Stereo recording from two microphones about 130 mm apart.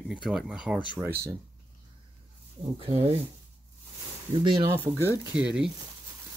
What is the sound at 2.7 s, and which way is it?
Speech, 45° right (ahead or behind).